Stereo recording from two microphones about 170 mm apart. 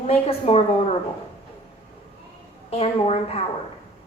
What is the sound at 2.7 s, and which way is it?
Speech, 35° left (ahead or behind).